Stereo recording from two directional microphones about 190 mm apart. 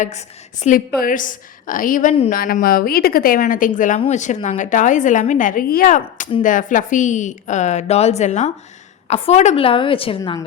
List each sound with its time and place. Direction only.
0.0 s a woman's voice: 40° left (ahead or behind)